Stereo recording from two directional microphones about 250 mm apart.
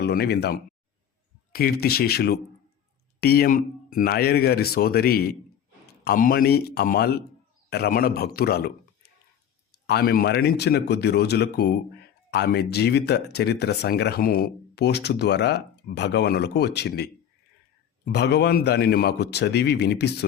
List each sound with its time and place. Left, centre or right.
0.0 s speech: left
9.8 s speech: left